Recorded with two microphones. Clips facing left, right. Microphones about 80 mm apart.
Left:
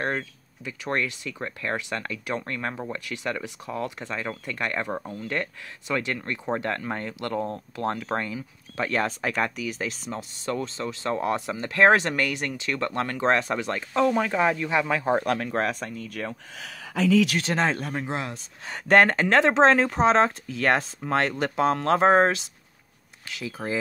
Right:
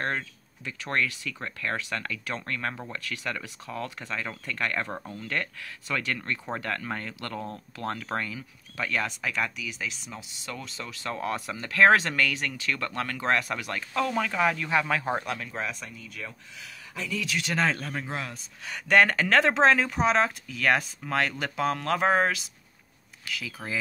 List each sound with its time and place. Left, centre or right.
0.0 s speech: centre
15.2 s speech: left
17.4 s speech: left